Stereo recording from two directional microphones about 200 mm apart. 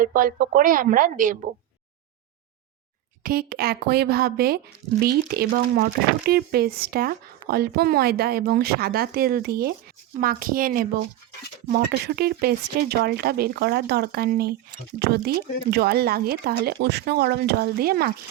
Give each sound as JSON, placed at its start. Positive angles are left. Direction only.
{"t": 0.0, "sound": "speech", "side_deg": -45}
{"t": 3.2, "sound": "speech", "side_deg": -50}